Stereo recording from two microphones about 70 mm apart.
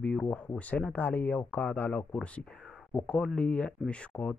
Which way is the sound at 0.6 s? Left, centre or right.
Left.